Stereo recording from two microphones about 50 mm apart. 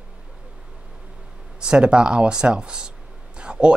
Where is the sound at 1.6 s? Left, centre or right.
Centre.